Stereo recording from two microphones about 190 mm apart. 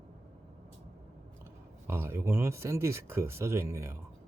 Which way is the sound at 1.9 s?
15° right (ahead or behind).